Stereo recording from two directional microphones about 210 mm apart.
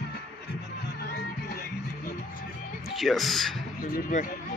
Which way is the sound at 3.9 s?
40° left (ahead or behind).